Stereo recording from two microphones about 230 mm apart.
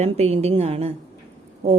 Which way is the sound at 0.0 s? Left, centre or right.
Right.